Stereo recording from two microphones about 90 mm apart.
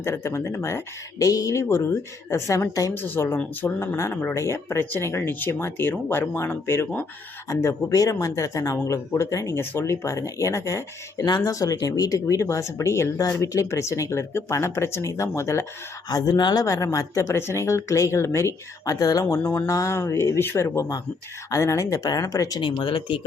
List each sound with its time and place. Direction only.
0.0 s speech: 30° left (ahead or behind)
2.9 s speech: 25° left (ahead or behind)
7.4 s speech: 40° left (ahead or behind)
11.3 s speech: 50° left (ahead or behind); by 15.6 s 35° left (ahead or behind)
16.0 s speech: 45° left (ahead or behind)
19.4 s speech: 25° left (ahead or behind)
19.6 s speech: 40° left (ahead or behind)
22.6 s speech: 65° left (ahead or behind)